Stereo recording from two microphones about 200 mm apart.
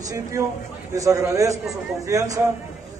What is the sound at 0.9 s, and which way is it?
A man's voice, 15° right (ahead or behind).